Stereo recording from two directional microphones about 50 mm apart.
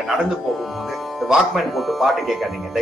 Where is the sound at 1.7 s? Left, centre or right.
Centre.